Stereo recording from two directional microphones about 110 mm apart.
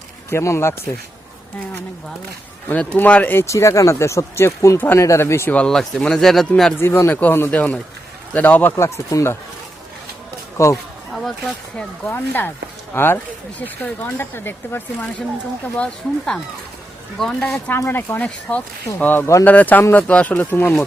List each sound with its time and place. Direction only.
0.3 s speech: 25° left (ahead or behind)
2.6 s speech: 15° left (ahead or behind)
3.4 s speech: 25° left (ahead or behind)
5.5 s speech: 5° left (ahead or behind)
6.8 s speech: 25° left (ahead or behind)
8.7 s speech: 30° left (ahead or behind)
10.6 s speech: 25° left (ahead or behind)
11.1 s speech: 5° left (ahead or behind)
12.0 s speech: 20° left (ahead or behind)
15.6 s speech: 10° left (ahead or behind)
17.7 s speech: 25° left (ahead or behind)
18.5 s speech: 10° left (ahead or behind)
19.5 s speech: 15° left (ahead or behind)